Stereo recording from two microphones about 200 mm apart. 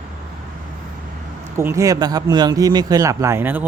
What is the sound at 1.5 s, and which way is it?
Speech, 15° right (ahead or behind).